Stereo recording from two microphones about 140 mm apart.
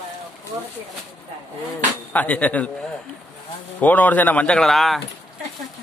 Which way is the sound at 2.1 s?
10° left (ahead or behind).